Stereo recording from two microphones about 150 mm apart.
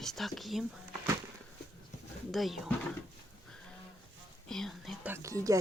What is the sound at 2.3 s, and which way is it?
Speech, centre (ahead or behind).